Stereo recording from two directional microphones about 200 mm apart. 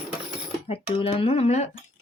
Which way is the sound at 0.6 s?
30° left (ahead or behind).